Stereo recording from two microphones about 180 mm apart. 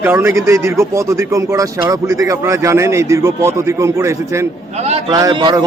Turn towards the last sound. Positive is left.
turn(degrees=-25)  # may be behind; listen again after turning